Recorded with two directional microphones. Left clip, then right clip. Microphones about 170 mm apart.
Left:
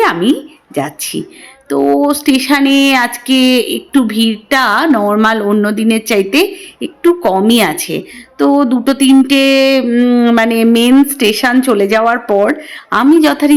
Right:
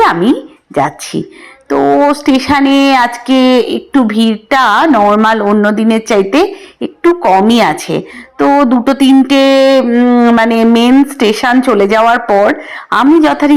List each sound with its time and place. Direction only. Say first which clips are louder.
0.0 s a woman's voice: right 3 dB; 5° left (ahead or behind)